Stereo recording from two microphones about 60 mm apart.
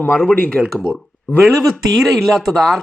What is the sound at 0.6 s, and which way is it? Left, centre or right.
Speech, centre.